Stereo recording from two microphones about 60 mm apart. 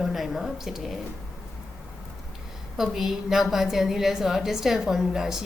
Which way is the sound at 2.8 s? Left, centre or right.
Centre.